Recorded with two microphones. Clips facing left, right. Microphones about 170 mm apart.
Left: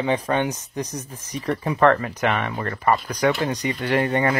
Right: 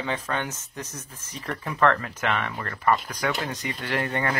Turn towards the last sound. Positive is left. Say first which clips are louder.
# left 7 dB
turn(degrees=20)  # may be behind; listen again after turning